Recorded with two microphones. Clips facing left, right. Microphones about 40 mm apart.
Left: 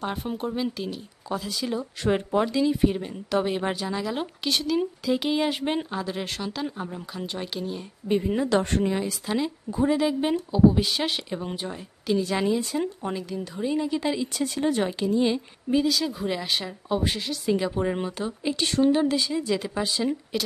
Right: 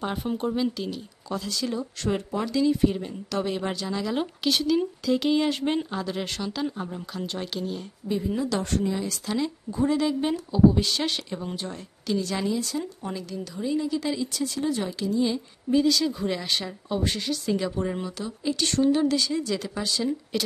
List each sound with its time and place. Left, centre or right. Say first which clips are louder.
0.0 s speech: right 1 dB; centre
2.0 s speech: left 5 dB; left; by 7.8 s centre
8.1 s a woman's voice: left 4 dB; left
9.0 s a woman's voice: left 1 dB; centre
15.7 s speech: right 1 dB; centre; by 18.6 s left
18.6 s speech: left 1 dB; centre
20.3 s a woman's voice: right 3 dB; centre